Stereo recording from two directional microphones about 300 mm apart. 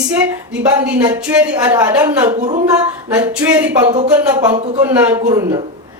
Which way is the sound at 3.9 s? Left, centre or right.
Right.